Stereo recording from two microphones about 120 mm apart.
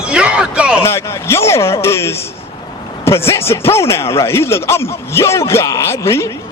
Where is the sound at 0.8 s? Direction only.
20° left (ahead or behind).